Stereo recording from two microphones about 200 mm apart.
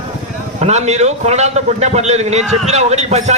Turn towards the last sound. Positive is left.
turn(degrees=-35)  # may be behind; listen again after turning